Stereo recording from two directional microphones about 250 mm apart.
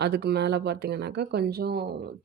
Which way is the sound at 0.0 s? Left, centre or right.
Right.